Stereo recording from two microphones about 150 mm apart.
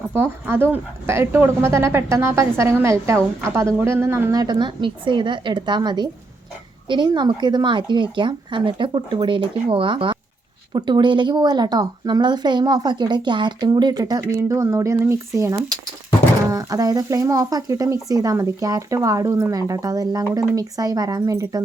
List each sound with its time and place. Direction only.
0.1 s speech: 15° right (ahead or behind)